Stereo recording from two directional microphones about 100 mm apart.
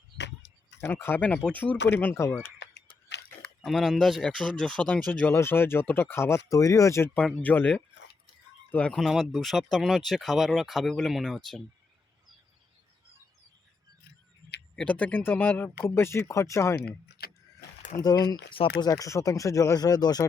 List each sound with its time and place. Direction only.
0.9 s speech: 20° left (ahead or behind)
3.6 s speech: centre (ahead or behind); by 7.1 s 30° left (ahead or behind)
7.4 s speech: 15° left (ahead or behind)
8.9 s speech: centre (ahead or behind)
14.8 s speech: 15° left (ahead or behind); by 16.7 s 30° left (ahead or behind)
18.0 s speech: 40° left (ahead or behind)